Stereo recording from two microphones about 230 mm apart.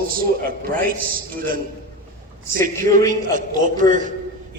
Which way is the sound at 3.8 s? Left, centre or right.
Right.